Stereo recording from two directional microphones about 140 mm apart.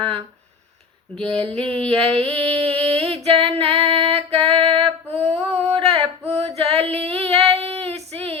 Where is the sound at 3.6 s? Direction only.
45° right (ahead or behind).